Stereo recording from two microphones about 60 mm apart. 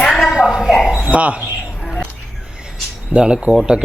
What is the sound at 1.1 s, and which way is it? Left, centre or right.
Speech, right.